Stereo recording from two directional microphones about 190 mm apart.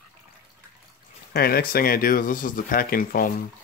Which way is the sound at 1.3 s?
55° left (ahead or behind).